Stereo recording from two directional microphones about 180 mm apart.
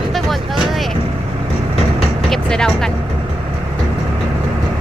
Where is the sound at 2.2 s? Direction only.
5° left (ahead or behind).